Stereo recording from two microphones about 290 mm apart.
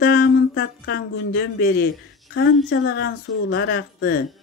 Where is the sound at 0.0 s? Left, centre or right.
Left.